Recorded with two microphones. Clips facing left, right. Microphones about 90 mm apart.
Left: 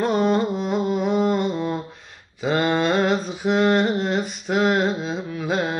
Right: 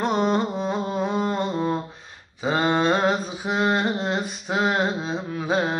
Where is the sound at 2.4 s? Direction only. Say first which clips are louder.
Left 1 dB; 25° right (ahead or behind).